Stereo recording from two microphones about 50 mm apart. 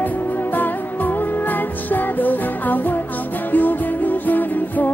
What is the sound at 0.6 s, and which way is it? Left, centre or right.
Music, left.